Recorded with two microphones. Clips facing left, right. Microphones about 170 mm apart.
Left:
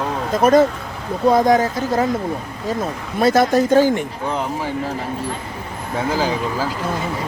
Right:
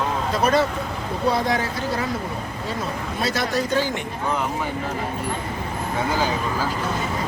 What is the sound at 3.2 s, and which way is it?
Speech, 50° left (ahead or behind).